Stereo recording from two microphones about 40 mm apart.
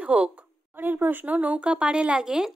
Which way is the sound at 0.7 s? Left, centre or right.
Right.